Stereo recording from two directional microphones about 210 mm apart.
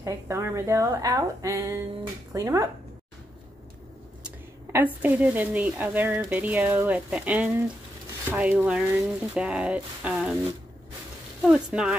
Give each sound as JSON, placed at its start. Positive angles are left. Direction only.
{"t": 0.0, "sound": "speech", "side_deg": -15}
{"t": 5.0, "sound": "speech", "side_deg": -10}
{"t": 11.4, "sound": "speech", "side_deg": -5}